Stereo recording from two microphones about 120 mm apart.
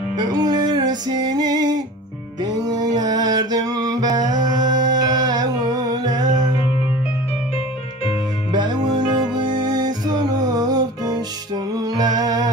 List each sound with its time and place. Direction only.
0.2 s music: 35° right (ahead or behind)
8.5 s music: 35° right (ahead or behind)